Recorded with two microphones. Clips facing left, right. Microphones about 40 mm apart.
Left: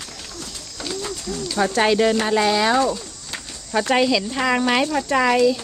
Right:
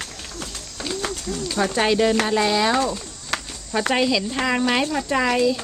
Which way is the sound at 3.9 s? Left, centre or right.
Centre.